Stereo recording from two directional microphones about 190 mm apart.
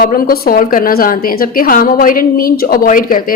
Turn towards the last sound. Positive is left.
turn(degrees=45)  # may be behind; listen again after turning